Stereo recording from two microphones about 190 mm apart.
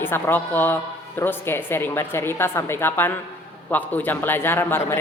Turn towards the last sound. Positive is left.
turn(degrees=10)  # may be behind; listen again after turning